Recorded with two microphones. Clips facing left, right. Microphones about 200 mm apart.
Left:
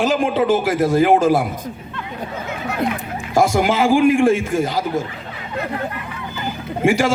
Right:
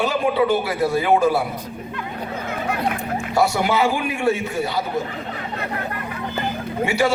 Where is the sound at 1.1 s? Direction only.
90° left.